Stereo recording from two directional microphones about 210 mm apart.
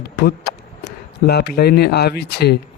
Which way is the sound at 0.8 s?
50° left (ahead or behind).